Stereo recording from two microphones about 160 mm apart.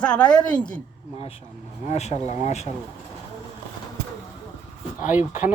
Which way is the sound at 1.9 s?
40° left (ahead or behind).